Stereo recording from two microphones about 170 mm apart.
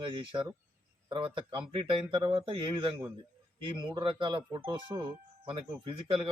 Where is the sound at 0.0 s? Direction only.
30° right (ahead or behind).